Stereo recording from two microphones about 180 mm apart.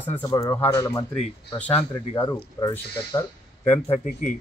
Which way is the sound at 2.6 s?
25° left (ahead or behind).